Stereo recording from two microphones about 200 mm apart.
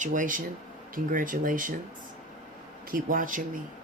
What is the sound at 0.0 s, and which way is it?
Speech, 40° right (ahead or behind).